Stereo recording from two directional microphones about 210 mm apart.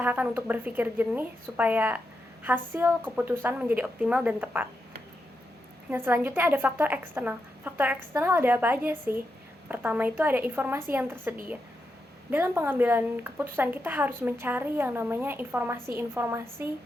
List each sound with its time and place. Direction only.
0.0 s a woman's voice: 10° right (ahead or behind)
5.9 s a woman's voice: 10° right (ahead or behind)